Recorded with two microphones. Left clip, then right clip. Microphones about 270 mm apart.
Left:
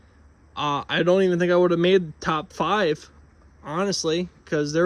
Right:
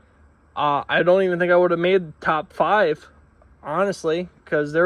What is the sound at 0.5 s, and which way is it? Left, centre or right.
Speech, centre.